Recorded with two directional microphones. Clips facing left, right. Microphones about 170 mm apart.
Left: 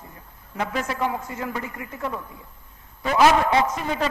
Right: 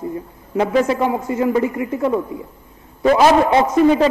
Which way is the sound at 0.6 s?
25° right (ahead or behind).